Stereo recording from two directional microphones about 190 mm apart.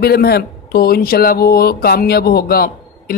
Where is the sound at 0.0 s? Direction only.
55° left (ahead or behind).